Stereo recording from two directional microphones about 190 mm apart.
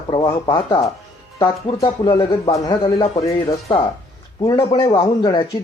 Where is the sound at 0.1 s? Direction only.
25° left (ahead or behind).